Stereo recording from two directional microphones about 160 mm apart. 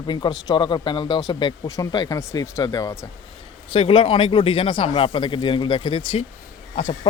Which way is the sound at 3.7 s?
35° left (ahead or behind).